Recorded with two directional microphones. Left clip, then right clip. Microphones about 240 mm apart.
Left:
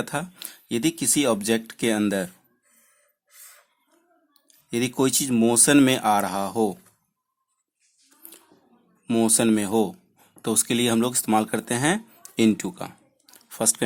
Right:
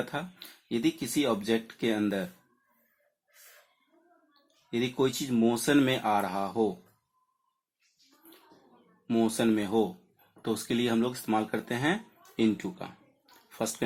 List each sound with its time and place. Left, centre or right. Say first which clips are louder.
0.0 s speech: left 6 dB; left
4.7 s speech: left 5 dB; left
9.0 s speech: left 6 dB; left
12.4 s a sound: left 7 dB; left